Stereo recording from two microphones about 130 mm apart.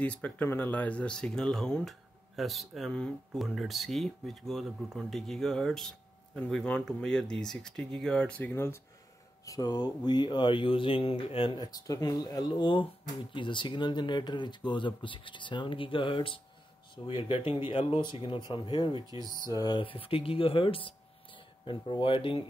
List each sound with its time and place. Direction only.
0.0 s speech: 10° left (ahead or behind); by 19.8 s 30° left (ahead or behind)
19.8 s speech: 45° left (ahead or behind)